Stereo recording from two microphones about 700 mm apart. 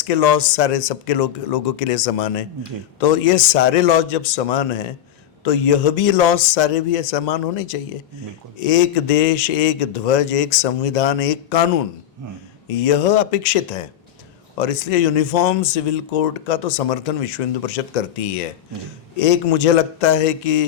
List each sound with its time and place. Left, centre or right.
0.0 s speech: left